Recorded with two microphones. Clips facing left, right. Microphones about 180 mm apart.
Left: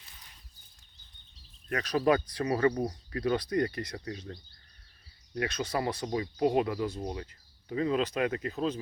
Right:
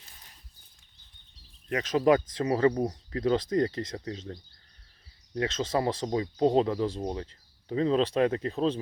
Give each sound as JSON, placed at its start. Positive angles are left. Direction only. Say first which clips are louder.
{"t": 1.7, "sound": "speech", "louder": "right 3 dB", "side_deg": -20}